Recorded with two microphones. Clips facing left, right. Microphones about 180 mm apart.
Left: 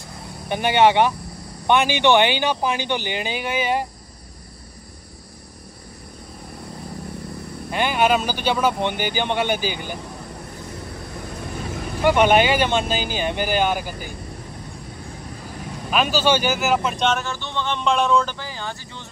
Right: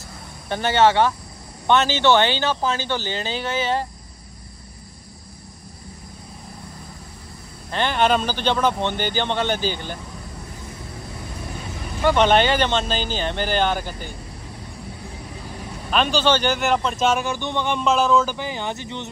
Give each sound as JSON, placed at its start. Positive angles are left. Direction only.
{"t": 0.5, "sound": "speech", "side_deg": 15}
{"t": 7.7, "sound": "speech", "side_deg": 10}
{"t": 12.0, "sound": "speech", "side_deg": 10}
{"t": 15.9, "sound": "speech", "side_deg": 5}
{"t": 17.0, "sound": "speech", "side_deg": -10}
{"t": 17.8, "sound": "a man's voice", "side_deg": 0}
{"t": 18.4, "sound": "speech", "side_deg": -20}